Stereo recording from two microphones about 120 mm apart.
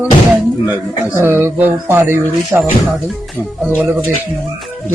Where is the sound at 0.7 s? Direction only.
15° right (ahead or behind).